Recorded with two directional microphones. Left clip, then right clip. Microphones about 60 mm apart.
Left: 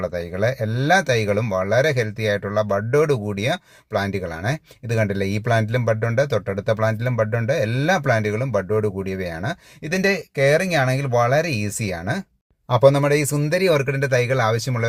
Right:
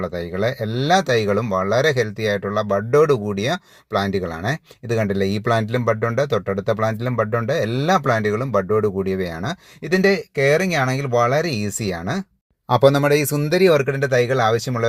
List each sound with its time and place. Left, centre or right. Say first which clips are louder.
0.0 s speech: even; centre; by 12.2 s right
12.6 s speech: right 1 dB; right
13.3 s speech: right 3 dB; right
13.7 s speech: right 2 dB; right